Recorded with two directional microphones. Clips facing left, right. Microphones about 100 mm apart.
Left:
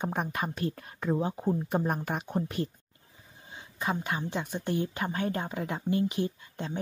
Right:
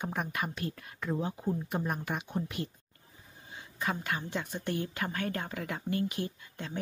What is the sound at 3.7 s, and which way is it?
Speech, 20° left (ahead or behind).